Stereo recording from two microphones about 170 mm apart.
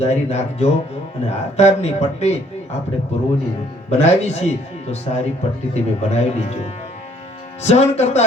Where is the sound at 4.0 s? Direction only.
40° left (ahead or behind).